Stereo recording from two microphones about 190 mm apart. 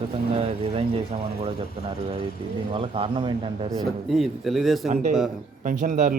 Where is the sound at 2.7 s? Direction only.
30° right (ahead or behind).